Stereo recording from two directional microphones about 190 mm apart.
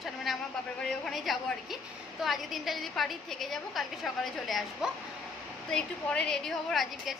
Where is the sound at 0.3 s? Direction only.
Centre (ahead or behind).